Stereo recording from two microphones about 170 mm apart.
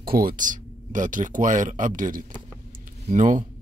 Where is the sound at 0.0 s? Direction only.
60° right (ahead or behind).